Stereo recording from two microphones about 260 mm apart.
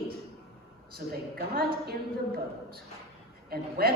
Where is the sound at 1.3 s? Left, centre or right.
Right.